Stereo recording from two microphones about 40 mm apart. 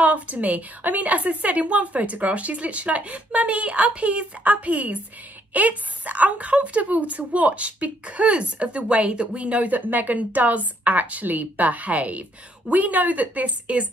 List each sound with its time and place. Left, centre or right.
0.0 s a woman's voice: right